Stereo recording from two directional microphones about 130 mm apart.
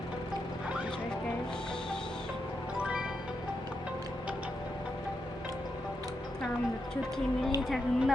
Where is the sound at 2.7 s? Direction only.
10° right (ahead or behind).